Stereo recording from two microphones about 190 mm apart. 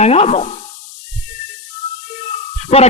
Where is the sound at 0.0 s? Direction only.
35° left (ahead or behind).